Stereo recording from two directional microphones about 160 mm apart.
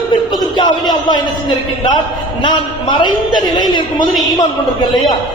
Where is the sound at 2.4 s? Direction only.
30° left (ahead or behind).